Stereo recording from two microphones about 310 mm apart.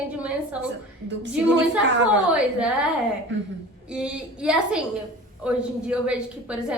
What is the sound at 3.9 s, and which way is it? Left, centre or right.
A woman's voice, centre.